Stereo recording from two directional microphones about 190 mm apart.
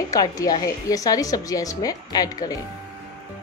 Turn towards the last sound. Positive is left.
turn(degrees=20)  # may be behind; listen again after turning